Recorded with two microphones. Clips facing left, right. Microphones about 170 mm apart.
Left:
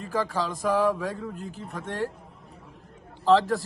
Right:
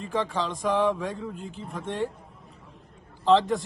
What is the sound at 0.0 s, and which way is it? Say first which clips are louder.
Speech: even; 5° left (ahead or behind).